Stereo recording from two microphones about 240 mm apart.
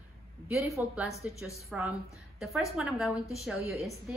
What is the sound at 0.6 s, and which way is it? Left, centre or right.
A woman's voice, centre.